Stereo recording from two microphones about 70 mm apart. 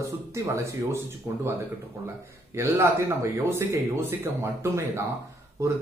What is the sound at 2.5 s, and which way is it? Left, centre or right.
A man's voice, right.